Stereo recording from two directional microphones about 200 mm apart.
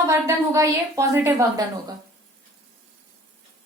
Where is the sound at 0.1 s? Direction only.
15° right (ahead or behind).